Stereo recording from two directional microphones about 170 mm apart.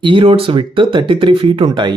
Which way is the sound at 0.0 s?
30° right (ahead or behind).